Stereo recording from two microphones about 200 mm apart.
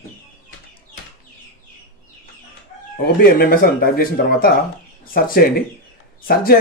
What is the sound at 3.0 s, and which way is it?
Speech, 50° left (ahead or behind).